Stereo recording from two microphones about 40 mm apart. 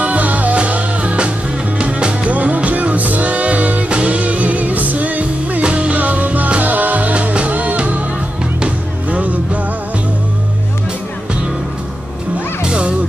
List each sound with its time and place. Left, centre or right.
0.0 s music: right
2.3 s music: right
5.6 s music: right
5.9 s music: right
12.6 s music: right